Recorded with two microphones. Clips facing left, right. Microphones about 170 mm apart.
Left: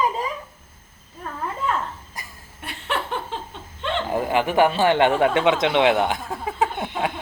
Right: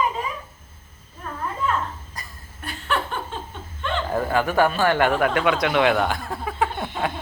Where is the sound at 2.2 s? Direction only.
25° left (ahead or behind).